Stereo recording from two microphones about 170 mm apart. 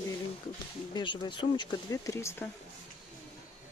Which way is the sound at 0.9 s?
30° left (ahead or behind).